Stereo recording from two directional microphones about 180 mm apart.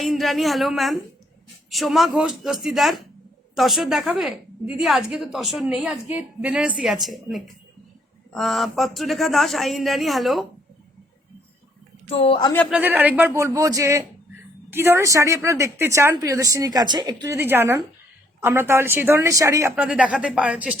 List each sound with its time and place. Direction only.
0.0 s a woman's voice: centre (ahead or behind)
12.0 s speech: 35° left (ahead or behind)
12.7 s a woman's voice: 10° right (ahead or behind)